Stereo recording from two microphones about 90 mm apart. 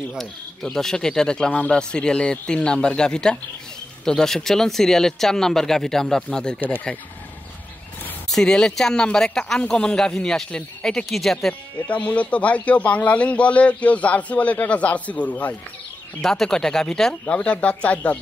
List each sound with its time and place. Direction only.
0.1 s a man's voice: 5° left (ahead or behind)
8.3 s a man's voice: 5° left (ahead or behind)
11.9 s a man's voice: 15° left (ahead or behind)
16.2 s a man's voice: 5° left (ahead or behind)